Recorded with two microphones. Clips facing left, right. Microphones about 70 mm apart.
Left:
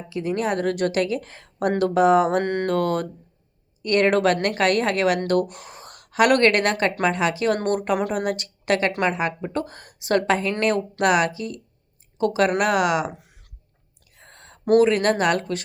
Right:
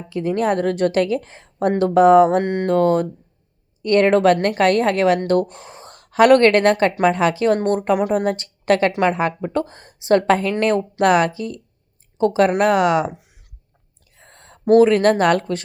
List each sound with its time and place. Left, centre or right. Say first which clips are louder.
0.1 s a woman's voice: right 5 dB; right
2.4 s music: right 2 dB; centre
2.6 s a woman's voice: right 6 dB; right
13.1 s a sound: even; centre
14.2 s a sound: right 1 dB; right
14.7 s a woman's voice: right 4 dB; right